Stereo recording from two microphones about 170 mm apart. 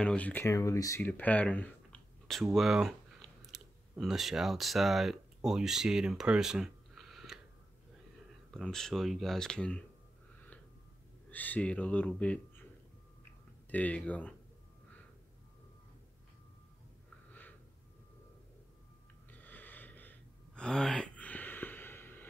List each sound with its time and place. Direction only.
0.0 s speech: 5° left (ahead or behind)
8.5 s speech: 5° left (ahead or behind)
11.2 s speech: 10° left (ahead or behind)
13.7 s speech: 10° left (ahead or behind)
17.3 s a sound: 10° left (ahead or behind)
19.3 s gasp: 10° left (ahead or behind)